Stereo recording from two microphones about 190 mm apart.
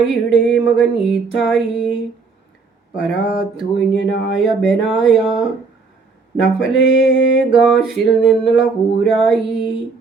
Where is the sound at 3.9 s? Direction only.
70° left (ahead or behind).